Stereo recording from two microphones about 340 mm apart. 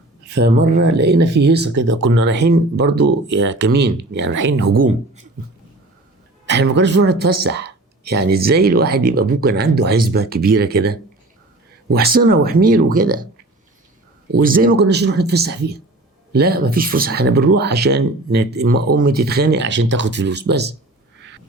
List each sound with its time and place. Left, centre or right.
0.8 s speech: right
6.4 s speech: right
14.3 s speech: right